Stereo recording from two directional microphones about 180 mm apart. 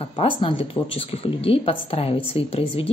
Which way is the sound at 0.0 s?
30° left (ahead or behind).